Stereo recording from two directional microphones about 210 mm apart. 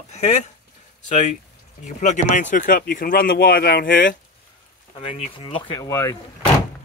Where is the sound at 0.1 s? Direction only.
35° left (ahead or behind).